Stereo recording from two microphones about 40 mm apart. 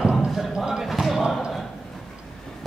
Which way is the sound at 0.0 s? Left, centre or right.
Centre.